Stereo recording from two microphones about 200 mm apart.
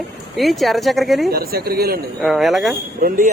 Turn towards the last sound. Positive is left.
turn(degrees=-45)  # may be behind; listen again after turning